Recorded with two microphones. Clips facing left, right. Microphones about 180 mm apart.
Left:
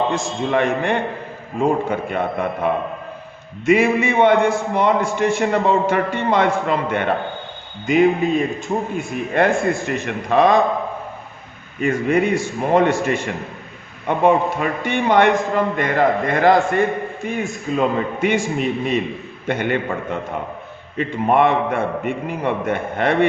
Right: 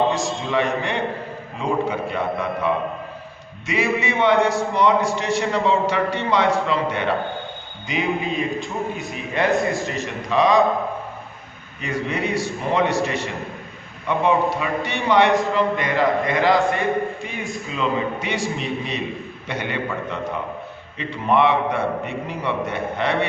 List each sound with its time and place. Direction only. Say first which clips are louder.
0.1 s a man's voice: left 2 dB; 50° left (ahead or behind)
11.8 s a man's voice: left 7 dB; 50° left (ahead or behind)